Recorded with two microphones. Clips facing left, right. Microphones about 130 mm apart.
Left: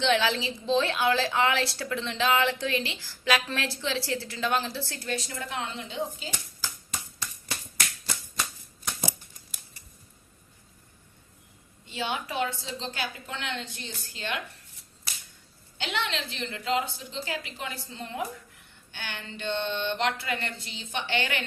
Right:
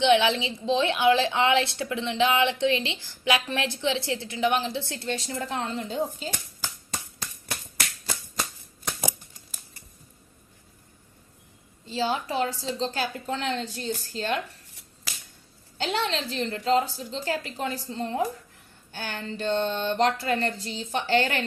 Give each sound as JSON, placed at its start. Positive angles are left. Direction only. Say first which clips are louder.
{"t": 0.0, "sound": "a woman's voice", "louder": "right 4 dB", "side_deg": -20}
{"t": 11.9, "sound": "speech", "louder": "right 5 dB", "side_deg": -35}
{"t": 15.8, "sound": "speech", "louder": "right 4 dB", "side_deg": -40}